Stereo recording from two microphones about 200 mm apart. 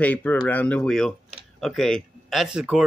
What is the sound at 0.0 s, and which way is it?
A man's voice, 10° left (ahead or behind).